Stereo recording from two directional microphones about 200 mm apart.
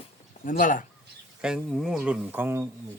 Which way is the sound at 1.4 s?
5° right (ahead or behind).